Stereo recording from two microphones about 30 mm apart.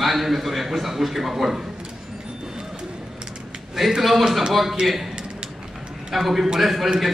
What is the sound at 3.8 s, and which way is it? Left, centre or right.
Speech, centre.